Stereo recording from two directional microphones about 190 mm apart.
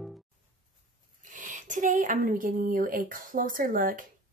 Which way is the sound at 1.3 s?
45° right (ahead or behind).